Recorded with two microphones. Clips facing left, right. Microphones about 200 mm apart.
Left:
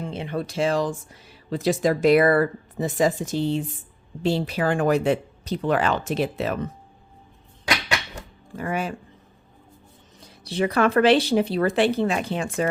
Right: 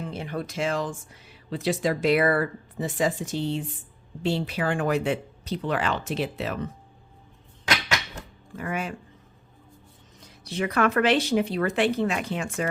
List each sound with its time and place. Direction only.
0.0 s speech: 25° left (ahead or behind); by 6.6 s 45° left (ahead or behind)
8.5 s speech: 35° left (ahead or behind)
10.2 s speech: 30° left (ahead or behind)